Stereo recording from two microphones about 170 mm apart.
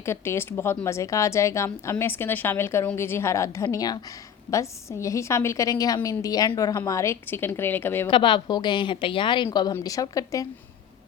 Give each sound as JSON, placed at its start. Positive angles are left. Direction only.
{"t": 0.0, "sound": "speech", "side_deg": 15}
{"t": 8.0, "sound": "a woman's voice", "side_deg": 30}